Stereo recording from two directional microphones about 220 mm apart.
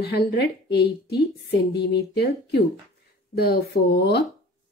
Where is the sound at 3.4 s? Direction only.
45° left (ahead or behind).